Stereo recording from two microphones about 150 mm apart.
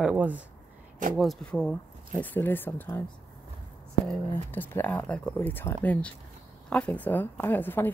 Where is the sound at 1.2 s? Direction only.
5° left (ahead or behind).